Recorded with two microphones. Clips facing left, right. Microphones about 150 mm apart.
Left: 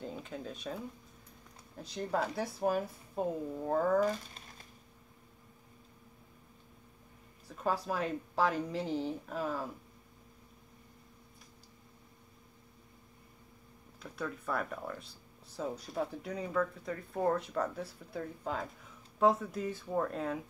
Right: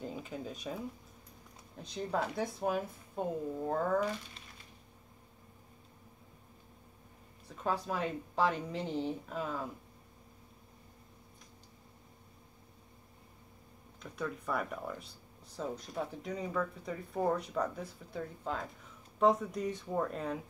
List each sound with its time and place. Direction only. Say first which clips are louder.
0.0 s a woman's voice: right 1 dB; 5° right (ahead or behind)
4.0 s speech: left 4 dB; 40° left (ahead or behind)
7.4 s a woman's voice: left 1 dB; 5° left (ahead or behind)
14.1 s a woman's voice: even; centre (ahead or behind)